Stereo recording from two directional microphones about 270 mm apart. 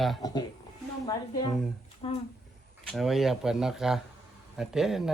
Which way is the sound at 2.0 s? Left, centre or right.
Centre.